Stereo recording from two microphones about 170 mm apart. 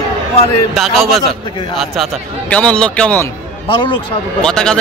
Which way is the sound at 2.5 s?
5° left (ahead or behind).